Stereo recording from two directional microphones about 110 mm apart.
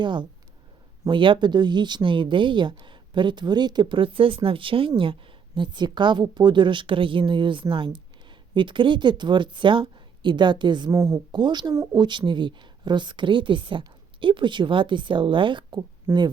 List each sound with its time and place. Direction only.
0.0 s speech: 45° right (ahead or behind)
10.9 s speech: 25° right (ahead or behind)
11.3 s speech: 40° right (ahead or behind)
16.1 s speech: 25° right (ahead or behind)